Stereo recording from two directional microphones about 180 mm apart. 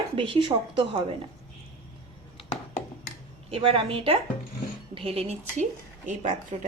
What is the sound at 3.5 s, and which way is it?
A woman's voice, 30° right (ahead or behind).